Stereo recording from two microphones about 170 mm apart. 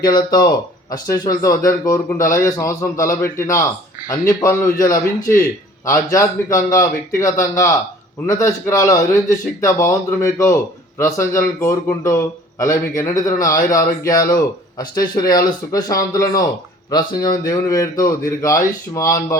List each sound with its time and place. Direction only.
0.0 s speech: 25° left (ahead or behind)